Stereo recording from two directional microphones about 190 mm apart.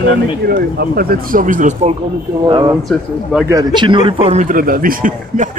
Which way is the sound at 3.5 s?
20° right (ahead or behind).